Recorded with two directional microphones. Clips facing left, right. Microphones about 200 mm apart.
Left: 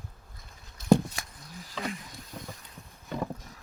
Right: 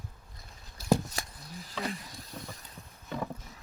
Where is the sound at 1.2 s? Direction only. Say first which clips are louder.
Right 3 dB; 30° right (ahead or behind).